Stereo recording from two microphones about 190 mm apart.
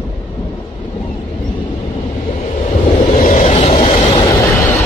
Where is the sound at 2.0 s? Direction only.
35° left (ahead or behind).